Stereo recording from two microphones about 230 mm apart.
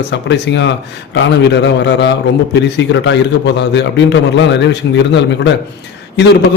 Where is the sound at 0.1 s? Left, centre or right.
Left.